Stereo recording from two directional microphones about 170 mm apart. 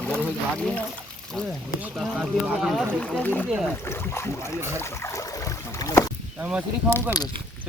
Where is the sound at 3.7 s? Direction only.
15° left (ahead or behind).